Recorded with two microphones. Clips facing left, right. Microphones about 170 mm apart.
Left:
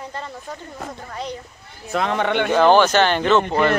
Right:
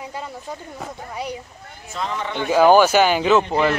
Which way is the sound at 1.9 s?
65° left (ahead or behind).